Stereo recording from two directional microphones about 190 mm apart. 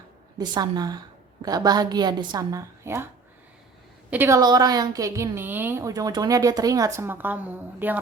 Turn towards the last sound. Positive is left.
turn(degrees=-10)  # may be behind; listen again after turning